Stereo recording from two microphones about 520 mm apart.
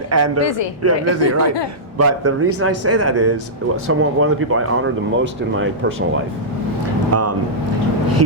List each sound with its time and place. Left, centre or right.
0.1 s speech: right
7.1 s speech: right